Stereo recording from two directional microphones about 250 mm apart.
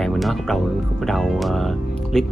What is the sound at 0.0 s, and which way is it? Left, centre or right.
Speech, centre.